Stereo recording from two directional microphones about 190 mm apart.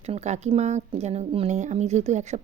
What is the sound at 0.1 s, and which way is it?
A woman's voice, 35° right (ahead or behind).